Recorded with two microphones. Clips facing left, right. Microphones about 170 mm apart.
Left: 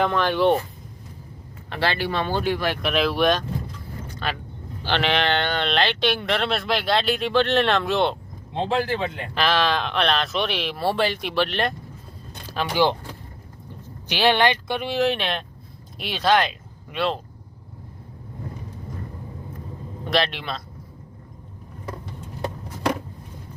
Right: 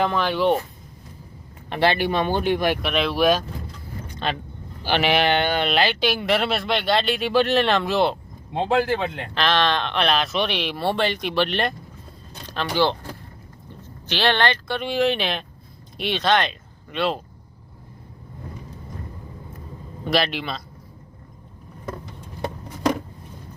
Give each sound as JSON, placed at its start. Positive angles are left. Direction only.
{"t": 0.0, "sound": "speech", "side_deg": -5}
{"t": 1.7, "sound": "speech", "side_deg": -15}
{"t": 2.8, "sound": "speech", "side_deg": 0}
{"t": 4.1, "sound": "vehicle", "side_deg": -20}
{"t": 4.8, "sound": "speech", "side_deg": -10}
{"t": 9.3, "sound": "speech", "side_deg": 5}
{"t": 14.1, "sound": "speech", "side_deg": 15}
{"t": 14.8, "sound": "speech", "side_deg": 0}
{"t": 20.1, "sound": "speech", "side_deg": -5}